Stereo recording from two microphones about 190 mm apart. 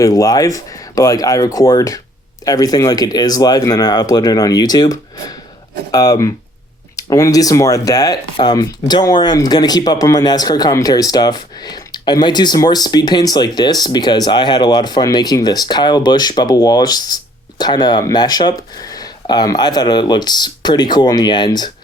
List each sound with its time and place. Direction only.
0.0 s speech: 15° left (ahead or behind)